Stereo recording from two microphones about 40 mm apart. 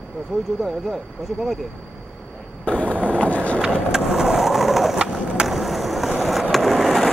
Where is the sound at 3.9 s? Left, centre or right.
Centre.